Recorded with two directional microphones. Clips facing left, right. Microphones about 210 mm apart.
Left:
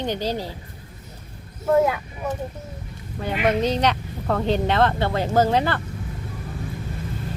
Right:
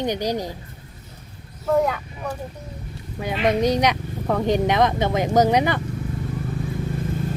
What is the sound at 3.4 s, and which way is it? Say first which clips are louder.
Speech: right 2 dB; 15° right (ahead or behind).